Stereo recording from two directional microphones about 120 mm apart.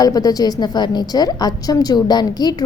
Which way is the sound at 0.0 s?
30° left (ahead or behind).